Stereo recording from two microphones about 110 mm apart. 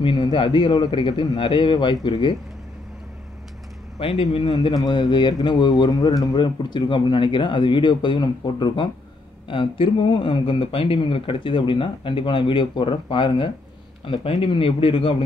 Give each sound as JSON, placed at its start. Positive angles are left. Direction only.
{"t": 0.0, "sound": "speech", "side_deg": 45}
{"t": 4.0, "sound": "a man's voice", "side_deg": 60}
{"t": 4.5, "sound": "speech", "side_deg": 35}
{"t": 14.0, "sound": "a man's voice", "side_deg": 60}